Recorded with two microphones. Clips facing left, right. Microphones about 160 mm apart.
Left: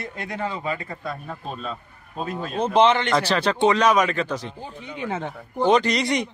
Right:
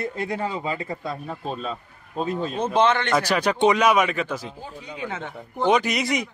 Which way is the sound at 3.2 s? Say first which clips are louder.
Even; 15° right (ahead or behind).